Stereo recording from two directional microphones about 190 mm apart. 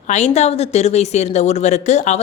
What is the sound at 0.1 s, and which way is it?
Speech, 35° left (ahead or behind).